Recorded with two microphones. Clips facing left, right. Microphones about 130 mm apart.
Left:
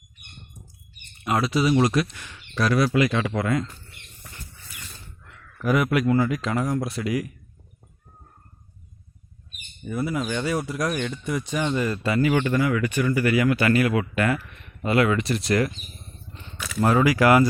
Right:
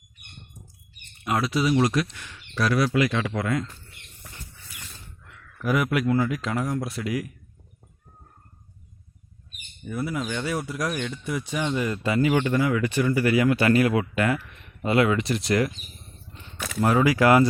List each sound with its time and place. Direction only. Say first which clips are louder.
1.2 s speech: left 2 dB; centre (ahead or behind)
5.5 s speech: left 2 dB; centre (ahead or behind)
9.8 s speech: left 2 dB; centre (ahead or behind); by 14.0 s 25° right (ahead or behind)
14.0 s speech: left 1 dB; 15° right (ahead or behind)
16.6 s a sound: right 2 dB; 50° right (ahead or behind)
17.0 s speech: even; 20° right (ahead or behind)